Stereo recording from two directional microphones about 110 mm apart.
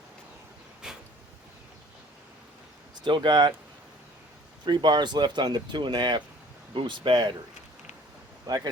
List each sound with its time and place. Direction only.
0.8 s a sound: 5° right (ahead or behind)
3.0 s speech: 45° right (ahead or behind)
4.6 s speech: 45° right (ahead or behind)
8.4 s speech: 35° right (ahead or behind)